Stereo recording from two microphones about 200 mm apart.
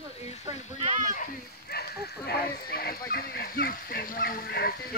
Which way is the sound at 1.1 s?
50° left (ahead or behind).